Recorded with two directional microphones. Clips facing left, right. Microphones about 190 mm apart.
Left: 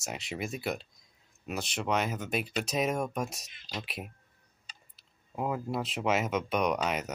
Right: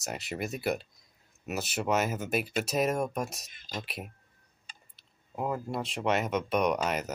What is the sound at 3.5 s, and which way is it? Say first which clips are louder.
Speech: right 1 dB; 45° right (ahead or behind).